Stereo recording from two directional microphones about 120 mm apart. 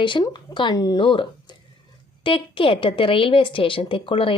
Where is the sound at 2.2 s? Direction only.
45° left (ahead or behind).